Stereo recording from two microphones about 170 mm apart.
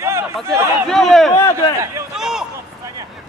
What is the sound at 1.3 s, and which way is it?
Speech, 15° left (ahead or behind).